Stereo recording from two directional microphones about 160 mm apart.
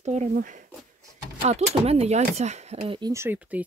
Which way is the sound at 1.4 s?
40° right (ahead or behind).